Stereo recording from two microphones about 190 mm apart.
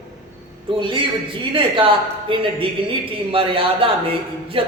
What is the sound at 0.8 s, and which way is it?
A man's voice, 25° right (ahead or behind).